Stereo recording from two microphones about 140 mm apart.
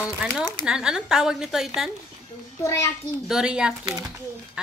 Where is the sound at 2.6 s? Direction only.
20° left (ahead or behind).